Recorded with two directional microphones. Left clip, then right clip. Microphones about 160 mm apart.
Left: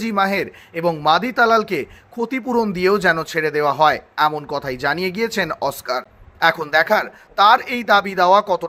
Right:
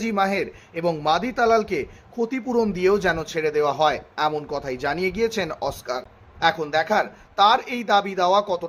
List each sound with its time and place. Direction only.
0.0 s speech: 20° left (ahead or behind)